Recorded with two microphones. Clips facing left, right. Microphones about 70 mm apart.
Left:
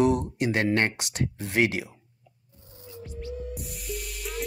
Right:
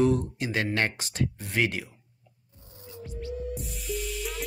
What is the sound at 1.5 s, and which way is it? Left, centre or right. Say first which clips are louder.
Speech: left 5 dB; left.